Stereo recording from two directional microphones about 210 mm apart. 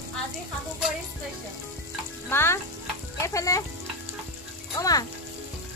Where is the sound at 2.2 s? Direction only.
10° left (ahead or behind).